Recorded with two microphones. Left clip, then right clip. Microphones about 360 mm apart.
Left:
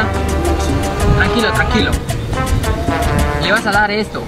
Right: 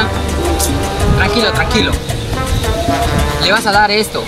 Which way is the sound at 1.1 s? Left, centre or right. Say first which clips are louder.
Right 1 dB; centre.